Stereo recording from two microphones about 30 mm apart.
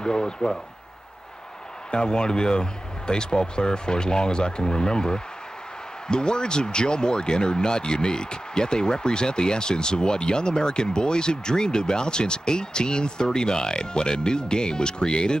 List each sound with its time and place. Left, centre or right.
0.0 s speech: left
1.9 s speech: left